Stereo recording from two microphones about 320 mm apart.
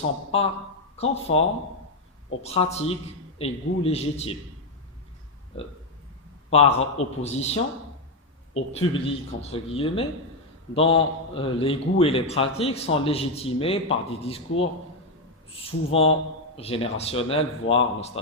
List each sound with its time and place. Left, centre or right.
0.3 s a man's voice: centre
5.5 s a man's voice: centre
15.5 s a man's voice: centre